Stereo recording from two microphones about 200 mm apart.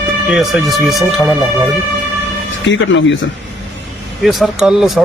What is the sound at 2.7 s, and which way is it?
Speech, 70° left (ahead or behind).